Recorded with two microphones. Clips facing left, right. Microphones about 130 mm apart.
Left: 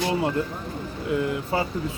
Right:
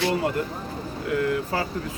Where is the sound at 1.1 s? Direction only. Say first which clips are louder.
Even; 20° left (ahead or behind).